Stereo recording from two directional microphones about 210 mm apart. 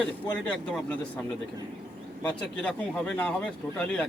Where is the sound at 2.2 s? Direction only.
5° left (ahead or behind).